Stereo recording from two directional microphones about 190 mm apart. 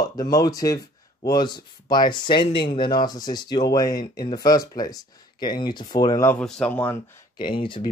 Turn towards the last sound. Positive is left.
turn(degrees=25)  # may be behind; listen again after turning